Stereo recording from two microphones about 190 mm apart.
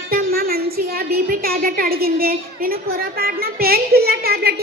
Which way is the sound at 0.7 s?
50° right (ahead or behind).